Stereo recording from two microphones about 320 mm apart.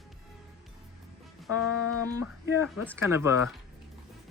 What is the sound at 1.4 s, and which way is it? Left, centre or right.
Music, left.